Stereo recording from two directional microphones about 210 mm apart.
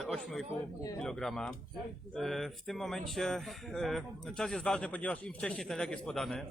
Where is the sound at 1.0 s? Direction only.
Centre (ahead or behind).